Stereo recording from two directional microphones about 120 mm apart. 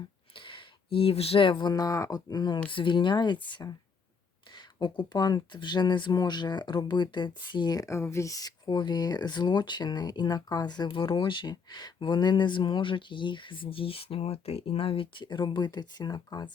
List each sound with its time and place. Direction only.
0.3 s speech: 45° left (ahead or behind)
4.8 s speech: 35° left (ahead or behind)